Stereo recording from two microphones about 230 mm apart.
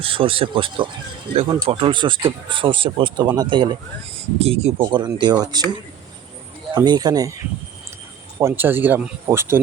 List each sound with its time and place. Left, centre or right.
0.0 s speech: right
6.7 s speech: centre
8.4 s speech: centre